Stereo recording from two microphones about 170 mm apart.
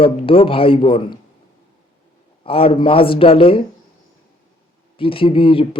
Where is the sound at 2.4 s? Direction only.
35° left (ahead or behind).